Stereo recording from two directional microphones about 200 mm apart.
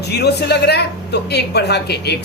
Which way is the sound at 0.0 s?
55° left (ahead or behind).